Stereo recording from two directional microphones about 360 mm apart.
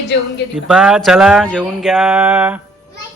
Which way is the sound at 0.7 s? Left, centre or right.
Centre.